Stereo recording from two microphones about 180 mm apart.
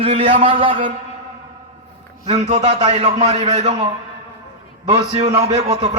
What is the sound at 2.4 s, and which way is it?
A man's voice, 40° right (ahead or behind).